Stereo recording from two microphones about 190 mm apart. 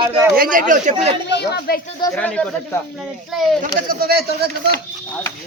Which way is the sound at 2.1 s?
5° left (ahead or behind).